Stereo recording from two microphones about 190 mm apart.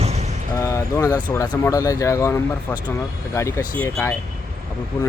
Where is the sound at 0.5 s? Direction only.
15° left (ahead or behind).